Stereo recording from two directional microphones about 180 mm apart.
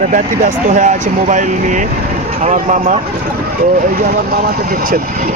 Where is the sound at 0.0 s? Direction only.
45° right (ahead or behind).